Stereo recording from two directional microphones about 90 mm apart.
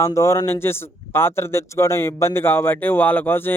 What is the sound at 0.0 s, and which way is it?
Speech, 35° left (ahead or behind).